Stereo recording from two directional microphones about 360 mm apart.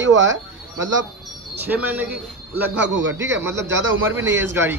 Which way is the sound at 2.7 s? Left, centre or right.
Right.